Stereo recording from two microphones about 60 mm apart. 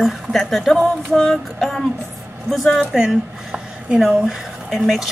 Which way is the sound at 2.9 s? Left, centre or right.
Centre.